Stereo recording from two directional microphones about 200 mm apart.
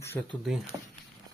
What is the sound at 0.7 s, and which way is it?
Speech, 20° right (ahead or behind).